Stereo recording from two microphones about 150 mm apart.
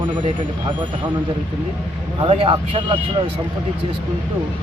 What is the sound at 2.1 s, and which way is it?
Speech, 35° right (ahead or behind).